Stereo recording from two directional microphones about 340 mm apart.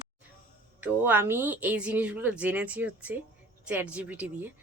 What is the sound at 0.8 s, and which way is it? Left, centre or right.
A woman's voice, centre.